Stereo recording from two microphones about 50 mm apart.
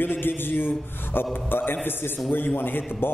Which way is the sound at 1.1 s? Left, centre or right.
Left.